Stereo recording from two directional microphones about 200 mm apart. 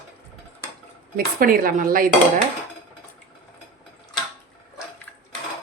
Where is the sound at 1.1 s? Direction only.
45° right (ahead or behind).